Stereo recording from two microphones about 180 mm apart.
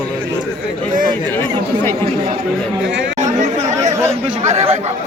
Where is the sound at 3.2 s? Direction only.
40° right (ahead or behind).